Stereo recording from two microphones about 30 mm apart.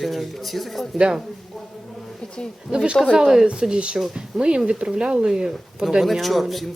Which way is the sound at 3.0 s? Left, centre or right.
Centre.